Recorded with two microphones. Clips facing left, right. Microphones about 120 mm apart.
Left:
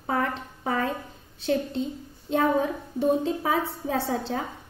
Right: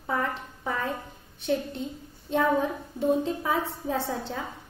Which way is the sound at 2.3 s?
70° left (ahead or behind).